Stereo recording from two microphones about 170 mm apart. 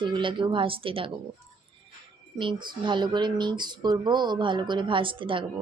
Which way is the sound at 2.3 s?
30° right (ahead or behind).